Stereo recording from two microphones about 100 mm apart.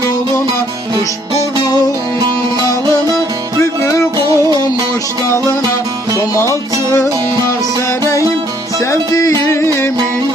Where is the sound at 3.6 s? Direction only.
30° left (ahead or behind).